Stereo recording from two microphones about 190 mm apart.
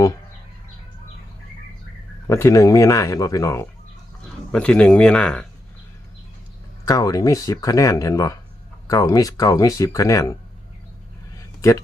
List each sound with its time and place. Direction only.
2.2 s speech: 15° left (ahead or behind)
6.8 s speech: 20° left (ahead or behind)
11.3 s a sound: 15° left (ahead or behind)